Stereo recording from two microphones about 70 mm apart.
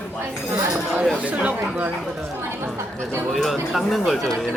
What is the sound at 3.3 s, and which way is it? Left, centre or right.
Speech, centre.